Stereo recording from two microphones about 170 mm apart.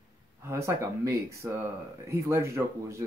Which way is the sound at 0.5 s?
20° right (ahead or behind).